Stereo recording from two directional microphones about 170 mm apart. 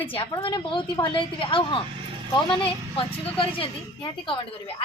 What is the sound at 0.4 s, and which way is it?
A woman's voice, 30° left (ahead or behind).